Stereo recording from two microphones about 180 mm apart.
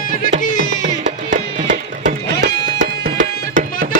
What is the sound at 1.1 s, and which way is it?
Music, 45° right (ahead or behind).